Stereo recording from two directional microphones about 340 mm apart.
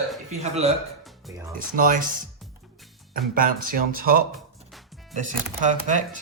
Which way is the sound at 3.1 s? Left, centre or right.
Right.